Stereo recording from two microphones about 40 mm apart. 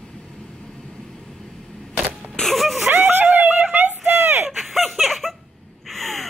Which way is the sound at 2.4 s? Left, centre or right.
Centre.